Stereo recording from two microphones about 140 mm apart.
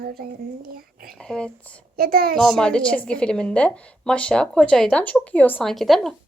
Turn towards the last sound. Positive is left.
turn(degrees=0)  # may be behind; listen again after turning